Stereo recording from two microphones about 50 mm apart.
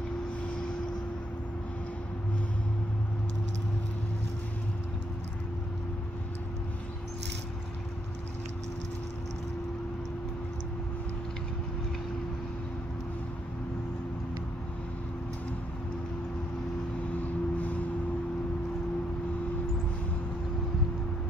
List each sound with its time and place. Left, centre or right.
17.2 s vehicle: left